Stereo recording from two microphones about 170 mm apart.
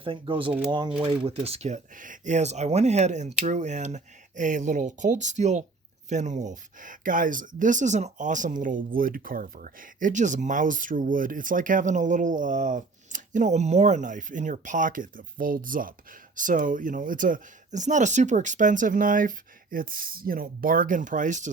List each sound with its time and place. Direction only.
0.0 s speech: 30° right (ahead or behind); by 21.5 s 45° right (ahead or behind)